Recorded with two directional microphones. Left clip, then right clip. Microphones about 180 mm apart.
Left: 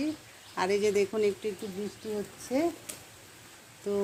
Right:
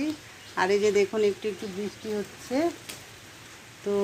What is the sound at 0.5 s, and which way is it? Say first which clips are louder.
Speech: right 4 dB; centre (ahead or behind).